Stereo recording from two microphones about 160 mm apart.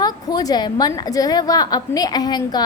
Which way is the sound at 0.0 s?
25° left (ahead or behind).